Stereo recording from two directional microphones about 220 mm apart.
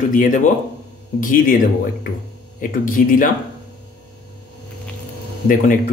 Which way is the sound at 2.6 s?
40° left (ahead or behind).